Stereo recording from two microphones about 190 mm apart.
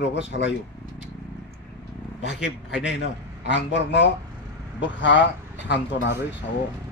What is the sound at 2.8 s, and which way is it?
A man's voice, 70° left (ahead or behind).